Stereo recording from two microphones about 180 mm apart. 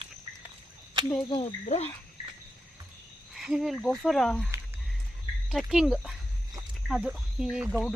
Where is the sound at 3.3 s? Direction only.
Centre (ahead or behind).